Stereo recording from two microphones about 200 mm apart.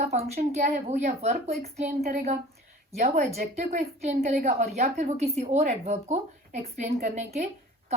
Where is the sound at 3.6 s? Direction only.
35° right (ahead or behind).